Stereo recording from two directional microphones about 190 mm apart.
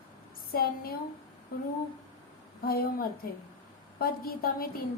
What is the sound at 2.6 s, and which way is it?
A woman's voice, 50° left (ahead or behind).